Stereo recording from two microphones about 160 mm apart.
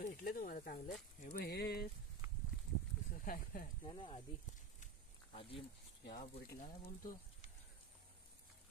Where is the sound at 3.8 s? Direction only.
35° left (ahead or behind).